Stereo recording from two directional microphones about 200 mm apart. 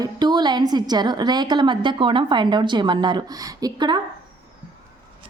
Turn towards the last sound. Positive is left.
turn(degrees=-20)  # may be behind; listen again after turning